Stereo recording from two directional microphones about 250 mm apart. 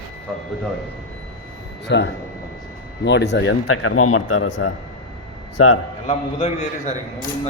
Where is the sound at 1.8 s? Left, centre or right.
Left.